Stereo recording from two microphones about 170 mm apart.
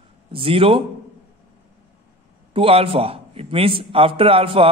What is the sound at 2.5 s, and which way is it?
A man's voice, 35° right (ahead or behind).